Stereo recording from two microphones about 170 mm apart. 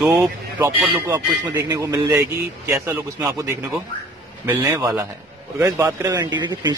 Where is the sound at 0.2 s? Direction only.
15° right (ahead or behind).